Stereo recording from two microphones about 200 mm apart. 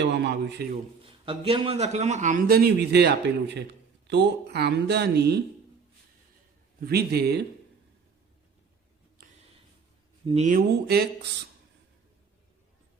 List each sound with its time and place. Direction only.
0.0 s a man's voice: 60° right (ahead or behind)
1.0 s a man's voice: 25° right (ahead or behind); by 5.4 s 55° right (ahead or behind)
6.7 s a man's voice: 50° right (ahead or behind)
9.2 s a sound: 45° right (ahead or behind)
10.2 s speech: 35° right (ahead or behind)
10.8 s a man's voice: 55° right (ahead or behind)